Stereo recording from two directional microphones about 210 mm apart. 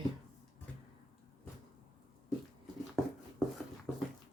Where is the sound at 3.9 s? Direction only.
Centre (ahead or behind).